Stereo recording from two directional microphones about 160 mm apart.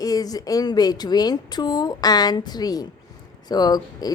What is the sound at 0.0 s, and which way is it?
A woman's voice, 25° left (ahead or behind).